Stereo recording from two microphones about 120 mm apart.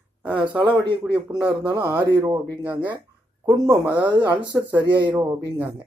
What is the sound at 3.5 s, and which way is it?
Speech, 30° right (ahead or behind).